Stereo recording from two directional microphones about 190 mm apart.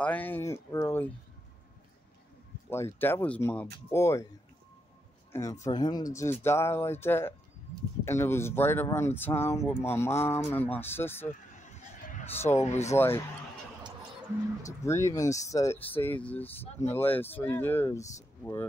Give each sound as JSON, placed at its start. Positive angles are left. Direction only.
{"t": 0.0, "sound": "speech", "side_deg": 10}
{"t": 2.7, "sound": "speech", "side_deg": 10}
{"t": 5.3, "sound": "speech", "side_deg": 15}
{"t": 11.5, "sound": "a sound", "side_deg": 40}
{"t": 12.5, "sound": "speech", "side_deg": 35}
{"t": 12.9, "sound": "speech", "side_deg": 10}
{"t": 14.8, "sound": "speech", "side_deg": 15}